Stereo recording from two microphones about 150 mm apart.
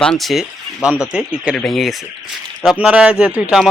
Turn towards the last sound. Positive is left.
turn(degrees=-10)  # may be behind; listen again after turning